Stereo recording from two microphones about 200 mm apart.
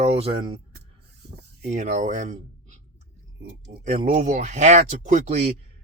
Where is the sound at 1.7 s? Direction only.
35° right (ahead or behind).